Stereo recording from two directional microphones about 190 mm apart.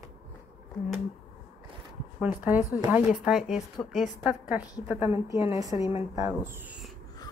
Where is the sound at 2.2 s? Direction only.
10° right (ahead or behind).